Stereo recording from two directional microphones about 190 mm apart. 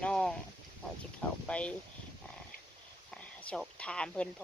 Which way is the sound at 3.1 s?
5° left (ahead or behind).